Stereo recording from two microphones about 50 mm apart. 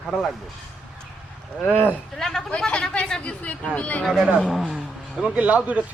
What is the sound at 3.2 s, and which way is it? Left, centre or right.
Speech, left.